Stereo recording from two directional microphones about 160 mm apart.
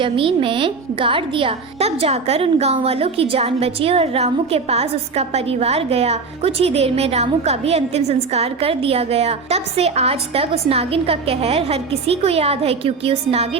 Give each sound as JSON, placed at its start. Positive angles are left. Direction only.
{"t": 0.0, "sound": "a woman's voice", "side_deg": -35}